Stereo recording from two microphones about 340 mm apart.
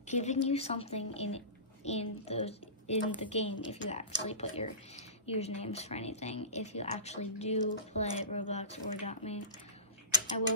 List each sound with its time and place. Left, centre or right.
0.1 s a woman's voice: centre